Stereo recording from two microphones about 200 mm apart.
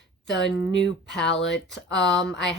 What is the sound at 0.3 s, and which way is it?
Speech, 60° left (ahead or behind).